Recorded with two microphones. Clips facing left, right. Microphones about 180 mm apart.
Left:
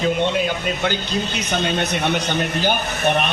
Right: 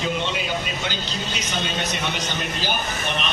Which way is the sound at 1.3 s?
60° left (ahead or behind).